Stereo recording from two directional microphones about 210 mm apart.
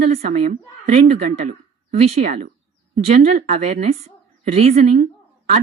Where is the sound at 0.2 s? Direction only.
35° right (ahead or behind).